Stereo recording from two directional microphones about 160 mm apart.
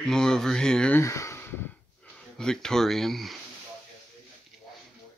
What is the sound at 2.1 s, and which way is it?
Speech, 5° left (ahead or behind).